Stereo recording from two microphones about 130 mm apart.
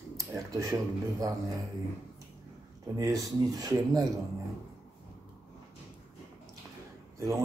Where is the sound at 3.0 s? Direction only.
25° right (ahead or behind).